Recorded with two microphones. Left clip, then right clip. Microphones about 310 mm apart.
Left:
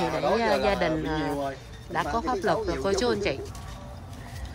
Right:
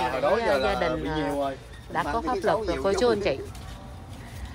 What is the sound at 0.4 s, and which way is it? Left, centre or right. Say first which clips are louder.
Speech: even; centre.